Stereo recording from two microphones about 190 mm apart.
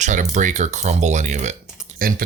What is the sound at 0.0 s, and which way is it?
Speech, 40° right (ahead or behind).